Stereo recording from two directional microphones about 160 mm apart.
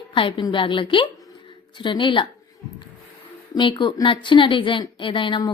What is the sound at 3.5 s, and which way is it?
A woman's voice, 30° left (ahead or behind).